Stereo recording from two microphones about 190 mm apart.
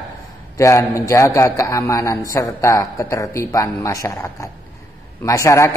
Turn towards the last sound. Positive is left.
turn(degrees=15)  # may be behind; listen again after turning